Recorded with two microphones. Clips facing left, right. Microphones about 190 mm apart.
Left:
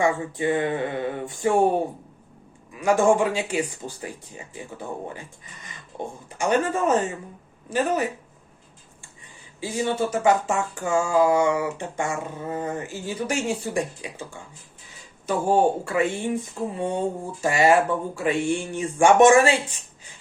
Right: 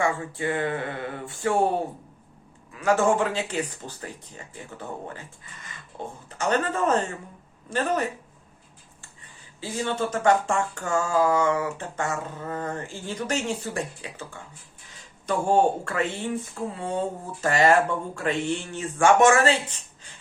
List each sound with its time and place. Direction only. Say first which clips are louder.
0.0 s speech: left 3 dB; 20° left (ahead or behind)
2.7 s speech: left 3 dB; 15° left (ahead or behind)
9.6 s speech: left 3 dB; 15° left (ahead or behind)